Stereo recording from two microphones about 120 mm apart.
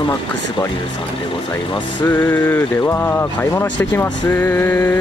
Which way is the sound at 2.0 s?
15° left (ahead or behind).